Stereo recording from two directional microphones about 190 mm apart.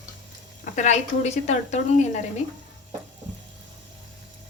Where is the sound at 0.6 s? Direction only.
40° left (ahead or behind).